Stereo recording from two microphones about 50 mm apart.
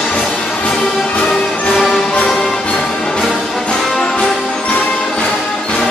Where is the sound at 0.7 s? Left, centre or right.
Centre.